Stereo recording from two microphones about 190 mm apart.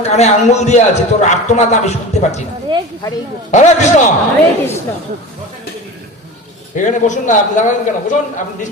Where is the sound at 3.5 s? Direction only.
40° left (ahead or behind).